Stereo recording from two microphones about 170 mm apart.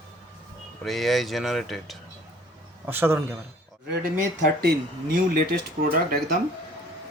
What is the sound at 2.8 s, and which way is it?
Speech, 15° right (ahead or behind).